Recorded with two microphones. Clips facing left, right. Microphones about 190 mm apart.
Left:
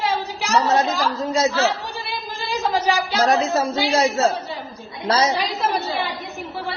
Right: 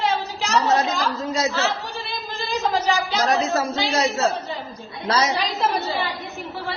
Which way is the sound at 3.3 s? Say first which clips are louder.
Left 1 dB; 30° left (ahead or behind).